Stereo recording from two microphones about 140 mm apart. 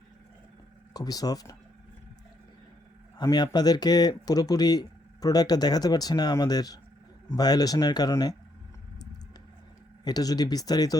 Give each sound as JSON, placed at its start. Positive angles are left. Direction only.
{"t": 0.9, "sound": "speech", "side_deg": 25}
{"t": 3.2, "sound": "speech", "side_deg": 30}
{"t": 10.0, "sound": "speech", "side_deg": 30}